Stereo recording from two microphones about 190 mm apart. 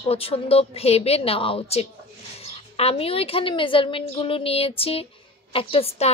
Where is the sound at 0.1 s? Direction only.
30° left (ahead or behind).